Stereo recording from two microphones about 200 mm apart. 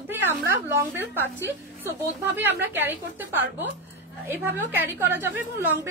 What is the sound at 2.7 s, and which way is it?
A woman's voice, 10° right (ahead or behind).